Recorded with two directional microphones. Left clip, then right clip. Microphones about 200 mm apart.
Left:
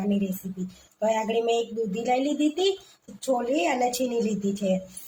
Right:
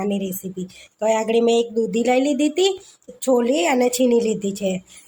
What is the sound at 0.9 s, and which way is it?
A woman's voice, 60° right (ahead or behind).